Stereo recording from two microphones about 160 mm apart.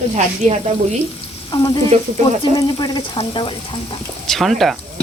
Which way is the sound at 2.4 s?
25° left (ahead or behind).